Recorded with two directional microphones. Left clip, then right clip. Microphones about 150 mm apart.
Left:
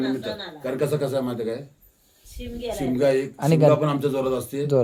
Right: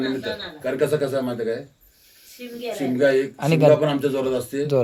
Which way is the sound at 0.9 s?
30° left (ahead or behind).